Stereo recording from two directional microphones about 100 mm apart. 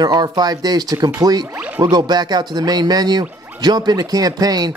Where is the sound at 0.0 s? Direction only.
45° right (ahead or behind).